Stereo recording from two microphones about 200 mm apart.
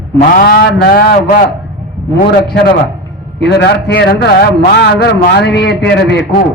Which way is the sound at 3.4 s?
55° left (ahead or behind).